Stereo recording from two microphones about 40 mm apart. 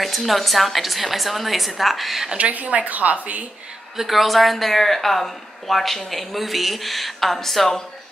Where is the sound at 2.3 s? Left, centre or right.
Right.